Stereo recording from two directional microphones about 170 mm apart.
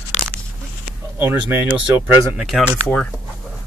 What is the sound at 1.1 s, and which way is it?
Speech, 15° right (ahead or behind).